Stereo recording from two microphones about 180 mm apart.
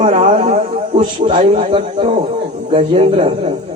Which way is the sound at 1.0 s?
25° right (ahead or behind).